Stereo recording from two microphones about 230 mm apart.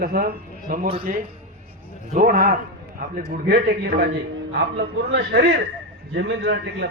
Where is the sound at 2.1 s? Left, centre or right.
Right.